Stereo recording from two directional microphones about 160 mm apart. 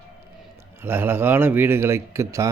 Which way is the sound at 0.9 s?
15° right (ahead or behind).